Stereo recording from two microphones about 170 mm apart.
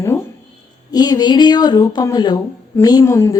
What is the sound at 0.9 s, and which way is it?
A woman's voice, 25° left (ahead or behind).